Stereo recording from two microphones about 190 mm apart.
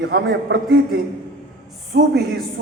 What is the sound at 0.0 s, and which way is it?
Speech, 60° right (ahead or behind).